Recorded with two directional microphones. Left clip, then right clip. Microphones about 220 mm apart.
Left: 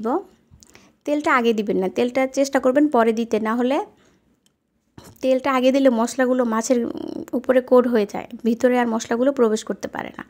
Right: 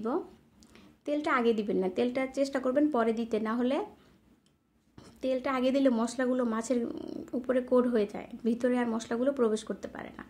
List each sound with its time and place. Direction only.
0.0 s a woman's voice: 35° left (ahead or behind)
4.9 s speech: 40° left (ahead or behind)